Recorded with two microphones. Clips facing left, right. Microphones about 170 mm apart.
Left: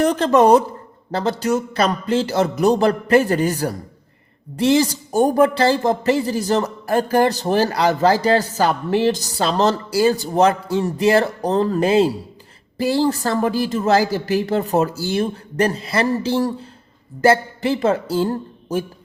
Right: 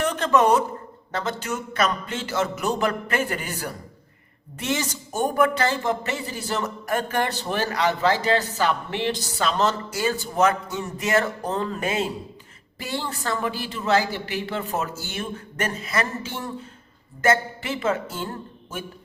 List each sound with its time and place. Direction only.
0.0 s speech: 35° left (ahead or behind)